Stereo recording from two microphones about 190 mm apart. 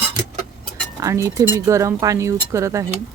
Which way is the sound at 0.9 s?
15° right (ahead or behind).